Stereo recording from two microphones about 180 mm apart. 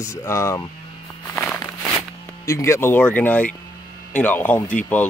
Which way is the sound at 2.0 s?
20° left (ahead or behind).